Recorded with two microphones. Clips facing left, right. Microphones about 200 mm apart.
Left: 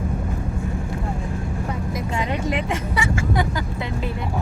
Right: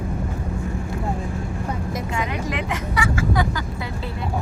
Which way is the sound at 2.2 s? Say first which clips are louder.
Left 4 dB; 30° left (ahead or behind).